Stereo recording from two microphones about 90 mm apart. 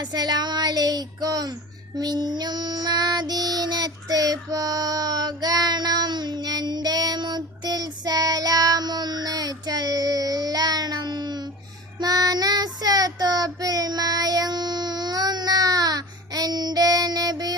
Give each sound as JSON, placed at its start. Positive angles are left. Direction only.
{"t": 0.0, "sound": "speech", "side_deg": -50}
{"t": 2.0, "sound": "child singing", "side_deg": -50}